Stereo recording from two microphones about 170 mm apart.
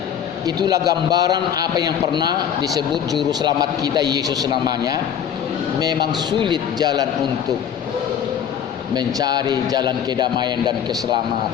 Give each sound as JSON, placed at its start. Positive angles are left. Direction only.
{"t": 0.4, "sound": "a man's voice", "side_deg": -20}
{"t": 9.0, "sound": "a man's voice", "side_deg": -25}